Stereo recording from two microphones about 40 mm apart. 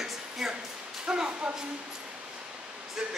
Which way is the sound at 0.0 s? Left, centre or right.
Centre.